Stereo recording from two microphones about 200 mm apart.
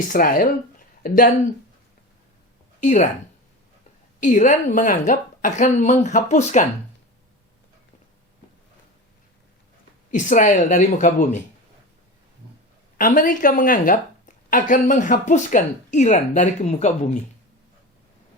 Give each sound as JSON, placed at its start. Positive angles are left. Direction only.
{"t": 0.1, "sound": "speech", "side_deg": 45}
{"t": 2.8, "sound": "a woman's voice", "side_deg": 35}
{"t": 4.2, "sound": "a woman's voice", "side_deg": 40}
{"t": 10.1, "sound": "a woman's voice", "side_deg": 40}
{"t": 13.0, "sound": "a woman's voice", "side_deg": 40}